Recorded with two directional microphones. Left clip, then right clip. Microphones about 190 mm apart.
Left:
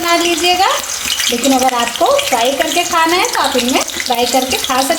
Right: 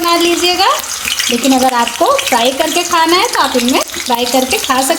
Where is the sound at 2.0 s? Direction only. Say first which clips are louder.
Even; 30° right (ahead or behind).